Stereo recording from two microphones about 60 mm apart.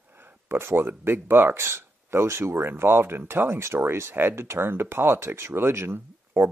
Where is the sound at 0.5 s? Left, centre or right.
Right.